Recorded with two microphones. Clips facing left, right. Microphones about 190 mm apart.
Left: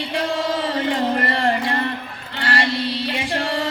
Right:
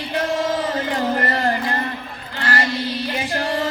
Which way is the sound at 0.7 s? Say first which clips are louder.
Left 1 dB; 30° left (ahead or behind).